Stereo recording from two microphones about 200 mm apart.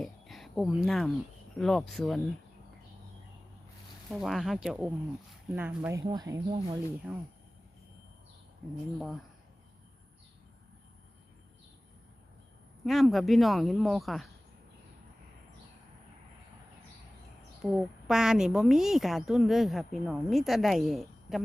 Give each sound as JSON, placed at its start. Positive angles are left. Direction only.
{"t": 0.0, "sound": "a sound", "side_deg": 0}
{"t": 1.5, "sound": "a woman's voice", "side_deg": 0}
{"t": 4.1, "sound": "a woman's voice", "side_deg": 0}
{"t": 7.1, "sound": "a woman's voice", "side_deg": -5}
{"t": 12.8, "sound": "a woman's voice", "side_deg": 0}
{"t": 17.6, "sound": "a woman's voice", "side_deg": -5}